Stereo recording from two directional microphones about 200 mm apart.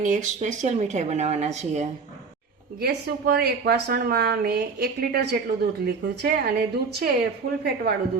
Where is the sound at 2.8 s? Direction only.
50° right (ahead or behind).